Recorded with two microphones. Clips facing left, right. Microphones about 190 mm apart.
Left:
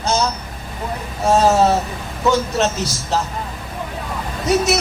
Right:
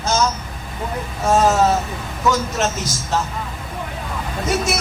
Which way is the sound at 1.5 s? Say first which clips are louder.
Left 2 dB; 35° left (ahead or behind).